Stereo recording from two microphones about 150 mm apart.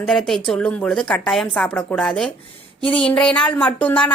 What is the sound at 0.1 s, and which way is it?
A woman's voice, centre (ahead or behind).